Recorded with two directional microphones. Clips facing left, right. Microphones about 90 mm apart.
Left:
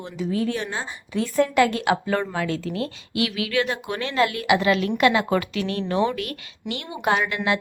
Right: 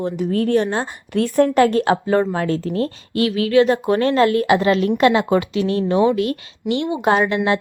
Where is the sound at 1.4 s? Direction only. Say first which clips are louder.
Right 5 dB; 40° right (ahead or behind).